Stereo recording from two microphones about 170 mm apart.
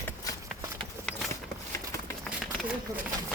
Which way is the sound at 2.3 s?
Centre (ahead or behind).